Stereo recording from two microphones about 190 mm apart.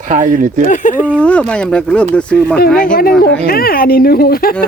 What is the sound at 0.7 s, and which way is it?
Speech, 40° left (ahead or behind).